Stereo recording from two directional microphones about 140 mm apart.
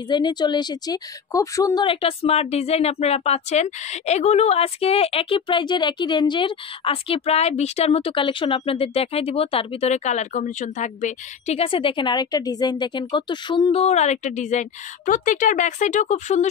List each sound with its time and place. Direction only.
0.1 s speech: 30° left (ahead or behind)
1.9 s speech: 45° left (ahead or behind)